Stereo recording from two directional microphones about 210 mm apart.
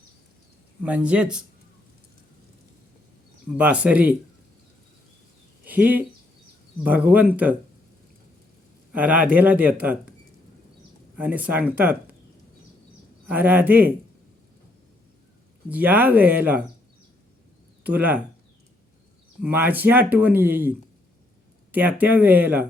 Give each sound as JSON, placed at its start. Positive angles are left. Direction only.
{"t": 0.8, "sound": "speech", "side_deg": -5}
{"t": 3.5, "sound": "speech", "side_deg": -5}
{"t": 5.6, "sound": "speech", "side_deg": -10}
{"t": 8.9, "sound": "a man's voice", "side_deg": -5}
{"t": 11.2, "sound": "speech", "side_deg": -10}
{"t": 13.2, "sound": "speech", "side_deg": -10}
{"t": 15.7, "sound": "speech", "side_deg": -10}
{"t": 17.8, "sound": "speech", "side_deg": -5}
{"t": 19.4, "sound": "speech", "side_deg": -10}